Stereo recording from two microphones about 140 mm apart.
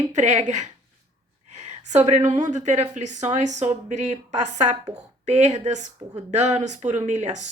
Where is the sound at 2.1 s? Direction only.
60° right (ahead or behind).